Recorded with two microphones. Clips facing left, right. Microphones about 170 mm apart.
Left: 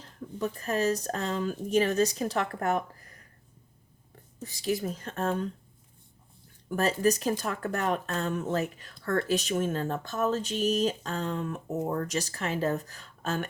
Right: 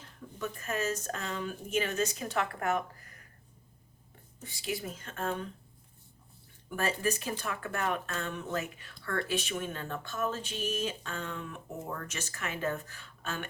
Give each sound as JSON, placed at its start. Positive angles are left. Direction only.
{"t": 0.0, "sound": "speech", "side_deg": 35}
{"t": 4.4, "sound": "speech", "side_deg": 40}
{"t": 6.7, "sound": "speech", "side_deg": 40}